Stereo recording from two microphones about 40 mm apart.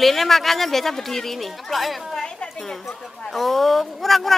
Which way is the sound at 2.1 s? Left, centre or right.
Centre.